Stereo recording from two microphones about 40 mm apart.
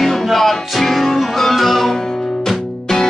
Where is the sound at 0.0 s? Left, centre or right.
Centre.